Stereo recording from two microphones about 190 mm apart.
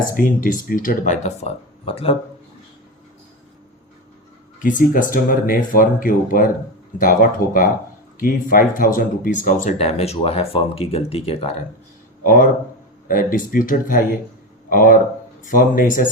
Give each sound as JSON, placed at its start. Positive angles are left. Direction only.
{"t": 0.1, "sound": "speech", "side_deg": 45}
{"t": 4.6, "sound": "speech", "side_deg": 45}
{"t": 12.2, "sound": "speech", "side_deg": 45}